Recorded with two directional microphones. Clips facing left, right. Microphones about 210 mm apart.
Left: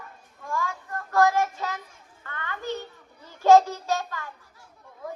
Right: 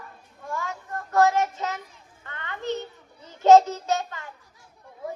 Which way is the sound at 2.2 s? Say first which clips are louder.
Right 1 dB; 20° right (ahead or behind).